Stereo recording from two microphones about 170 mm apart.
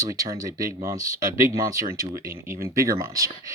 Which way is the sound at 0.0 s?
20° right (ahead or behind).